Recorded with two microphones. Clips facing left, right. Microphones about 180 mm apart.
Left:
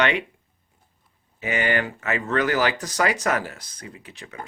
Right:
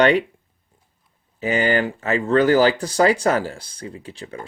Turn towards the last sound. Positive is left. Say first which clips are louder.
# right 7 dB
turn(degrees=-30)  # may be behind; listen again after turning